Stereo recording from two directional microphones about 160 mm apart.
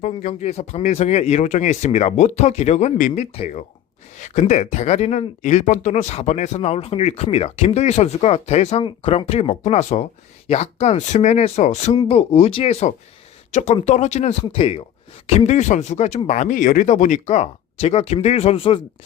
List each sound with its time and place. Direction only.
0.0 s speech: 45° left (ahead or behind)